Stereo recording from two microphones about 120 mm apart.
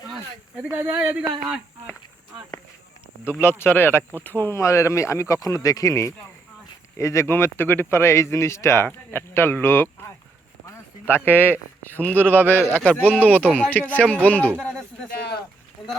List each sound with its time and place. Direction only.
0.6 s speech: 20° right (ahead or behind)
3.6 s speech: 20° left (ahead or behind)
11.1 s a man's voice: 15° left (ahead or behind)